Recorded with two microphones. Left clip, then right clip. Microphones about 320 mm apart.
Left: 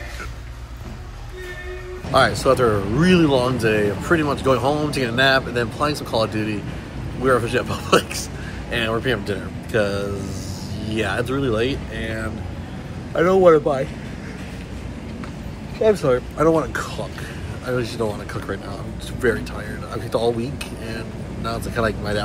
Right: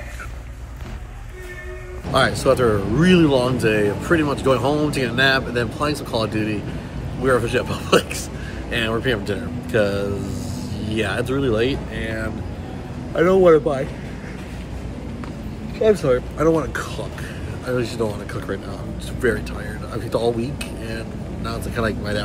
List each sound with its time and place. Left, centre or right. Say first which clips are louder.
2.1 s speech: left 1 dB; centre
15.8 s speech: even; centre